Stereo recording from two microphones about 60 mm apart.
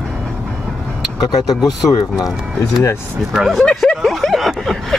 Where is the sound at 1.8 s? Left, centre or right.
Left.